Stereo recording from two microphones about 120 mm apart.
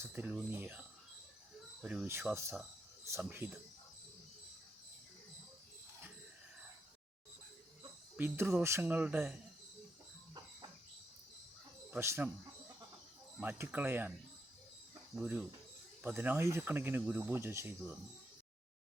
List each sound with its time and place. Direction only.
0.1 s speech: 15° right (ahead or behind)
2.3 s speech: 25° right (ahead or behind)
8.1 s speech: 15° right (ahead or behind)
11.9 s speech: 20° right (ahead or behind)
13.4 s speech: 15° right (ahead or behind)
15.1 s speech: 5° right (ahead or behind)